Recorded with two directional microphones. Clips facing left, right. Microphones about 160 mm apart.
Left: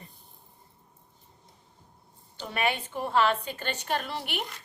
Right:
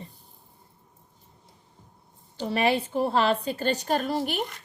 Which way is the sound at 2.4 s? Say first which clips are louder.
Right 6 dB; 35° right (ahead or behind).